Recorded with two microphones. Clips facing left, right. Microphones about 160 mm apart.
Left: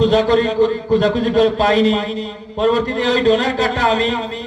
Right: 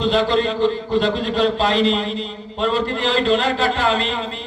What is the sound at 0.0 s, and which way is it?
Mantra, 45° left (ahead or behind).